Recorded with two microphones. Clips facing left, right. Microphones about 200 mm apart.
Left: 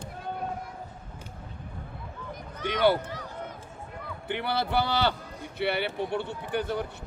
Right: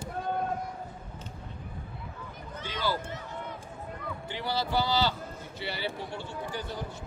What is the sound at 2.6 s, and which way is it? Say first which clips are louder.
Speech: left 9 dB; 65° left (ahead or behind).